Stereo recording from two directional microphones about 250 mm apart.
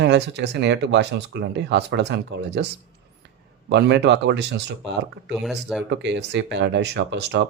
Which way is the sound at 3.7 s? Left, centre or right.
Right.